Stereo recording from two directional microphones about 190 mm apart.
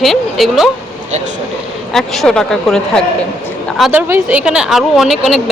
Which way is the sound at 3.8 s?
5° right (ahead or behind).